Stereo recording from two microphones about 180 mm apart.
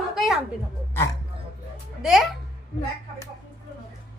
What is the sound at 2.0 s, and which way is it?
Speech, centre (ahead or behind).